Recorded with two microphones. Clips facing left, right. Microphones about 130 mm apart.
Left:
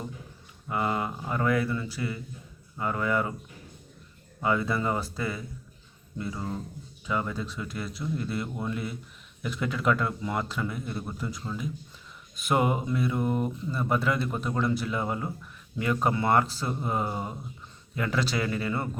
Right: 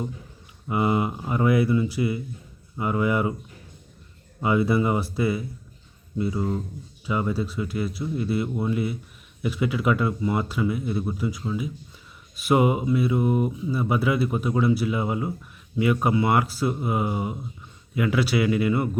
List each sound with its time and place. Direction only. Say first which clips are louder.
0.7 s speech: right 5 dB; 15° right (ahead or behind)
4.4 s speech: right 5 dB; 10° right (ahead or behind)